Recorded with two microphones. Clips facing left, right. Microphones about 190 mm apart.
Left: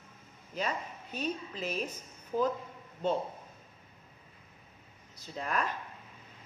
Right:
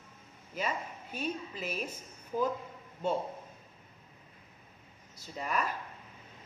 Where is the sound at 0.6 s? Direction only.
10° right (ahead or behind).